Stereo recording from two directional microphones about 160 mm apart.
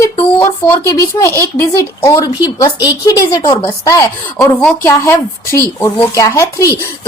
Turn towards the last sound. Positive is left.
turn(degrees=20)  # may be behind; listen again after turning